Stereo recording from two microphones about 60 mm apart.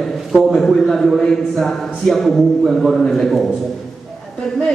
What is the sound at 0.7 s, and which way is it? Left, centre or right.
A man's voice, centre.